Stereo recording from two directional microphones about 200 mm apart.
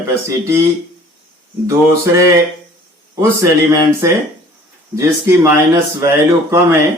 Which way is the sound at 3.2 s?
15° right (ahead or behind).